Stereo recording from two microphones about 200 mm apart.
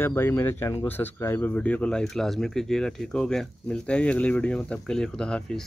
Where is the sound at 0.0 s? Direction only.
10° left (ahead or behind).